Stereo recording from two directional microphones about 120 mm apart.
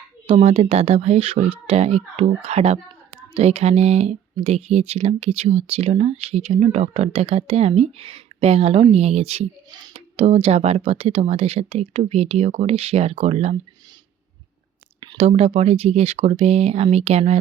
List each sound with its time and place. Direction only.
0.3 s speech: 55° right (ahead or behind)
15.2 s speech: 55° right (ahead or behind)